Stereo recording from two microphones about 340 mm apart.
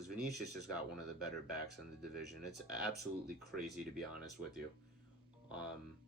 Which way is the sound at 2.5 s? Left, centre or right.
Right.